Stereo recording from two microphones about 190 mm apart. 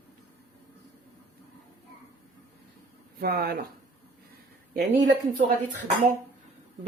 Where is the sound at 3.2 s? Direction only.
55° right (ahead or behind).